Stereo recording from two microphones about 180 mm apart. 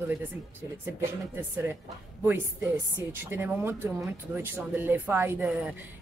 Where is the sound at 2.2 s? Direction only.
10° right (ahead or behind).